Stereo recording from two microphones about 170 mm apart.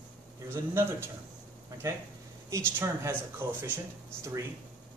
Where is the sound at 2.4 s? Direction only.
15° right (ahead or behind).